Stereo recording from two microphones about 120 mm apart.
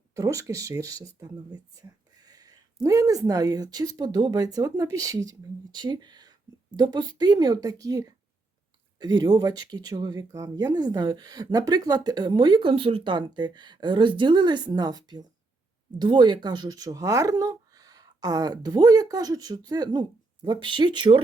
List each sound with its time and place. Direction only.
0.1 s speech: 25° right (ahead or behind)